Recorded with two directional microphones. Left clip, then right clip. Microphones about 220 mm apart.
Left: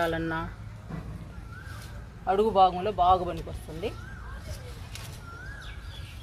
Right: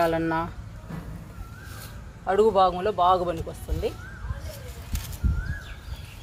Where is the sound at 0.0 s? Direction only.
25° right (ahead or behind).